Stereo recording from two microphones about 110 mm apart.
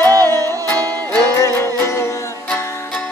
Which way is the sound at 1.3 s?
25° left (ahead or behind).